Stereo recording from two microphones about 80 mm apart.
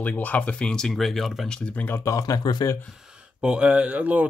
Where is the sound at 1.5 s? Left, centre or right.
Centre.